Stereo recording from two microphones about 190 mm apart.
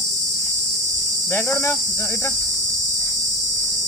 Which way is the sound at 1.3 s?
10° left (ahead or behind).